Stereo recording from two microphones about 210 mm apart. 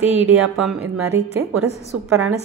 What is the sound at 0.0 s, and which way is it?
Speech, 5° right (ahead or behind).